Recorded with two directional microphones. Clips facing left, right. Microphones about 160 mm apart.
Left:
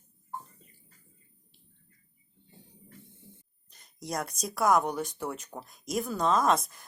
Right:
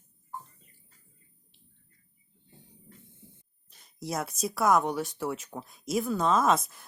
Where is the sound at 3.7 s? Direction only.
Centre (ahead or behind).